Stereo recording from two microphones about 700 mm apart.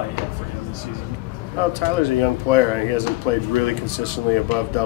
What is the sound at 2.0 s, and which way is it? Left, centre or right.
Speech, right.